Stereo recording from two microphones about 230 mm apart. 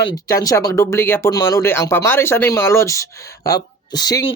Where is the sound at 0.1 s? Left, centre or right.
Centre.